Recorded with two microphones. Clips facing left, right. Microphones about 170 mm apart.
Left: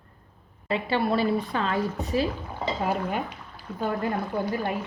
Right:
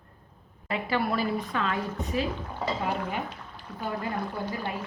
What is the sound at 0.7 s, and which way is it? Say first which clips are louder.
A woman's voice: left 3 dB; 30° left (ahead or behind).